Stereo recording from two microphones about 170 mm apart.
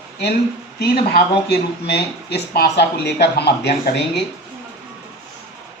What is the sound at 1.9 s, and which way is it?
Speech, 75° left (ahead or behind).